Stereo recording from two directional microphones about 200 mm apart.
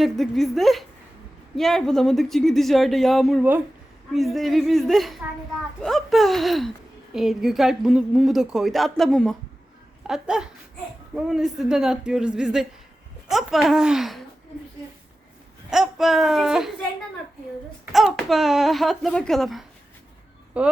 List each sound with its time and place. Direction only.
0.0 s speech: centre (ahead or behind)
15.7 s speech: centre (ahead or behind)
17.9 s speech: centre (ahead or behind)